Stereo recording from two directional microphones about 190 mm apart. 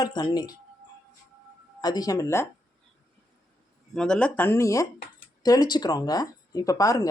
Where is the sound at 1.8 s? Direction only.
20° left (ahead or behind).